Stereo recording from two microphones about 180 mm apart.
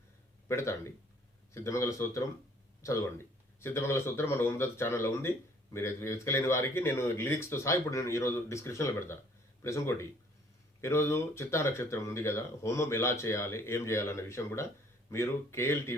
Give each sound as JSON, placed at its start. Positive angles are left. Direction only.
{"t": 0.4, "sound": "speech", "side_deg": 15}